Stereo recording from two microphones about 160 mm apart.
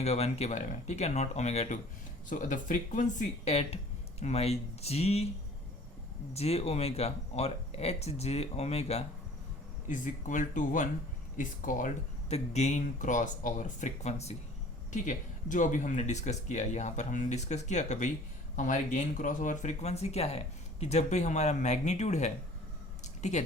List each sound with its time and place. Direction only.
0.0 s speech: 40° left (ahead or behind)
2.3 s speech: 55° left (ahead or behind)
6.3 s speech: 40° left (ahead or behind)
9.9 s speech: 55° left (ahead or behind)
12.3 s speech: 45° left (ahead or behind)
14.9 s speech: 55° left (ahead or behind)
23.0 s a sound: 45° left (ahead or behind)